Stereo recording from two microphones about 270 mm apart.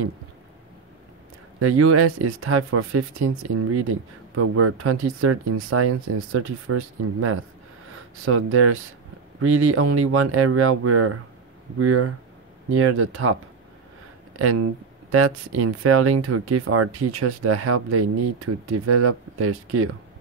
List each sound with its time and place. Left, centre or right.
1.6 s speech: right
4.4 s speech: right
14.4 s speech: right